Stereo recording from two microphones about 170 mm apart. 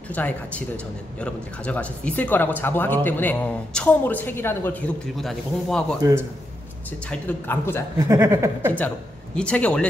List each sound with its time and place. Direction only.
0.1 s speech: 10° left (ahead or behind)
7.1 s speech: 10° left (ahead or behind)
8.1 s speech: 15° right (ahead or behind)
8.7 s speech: 10° left (ahead or behind)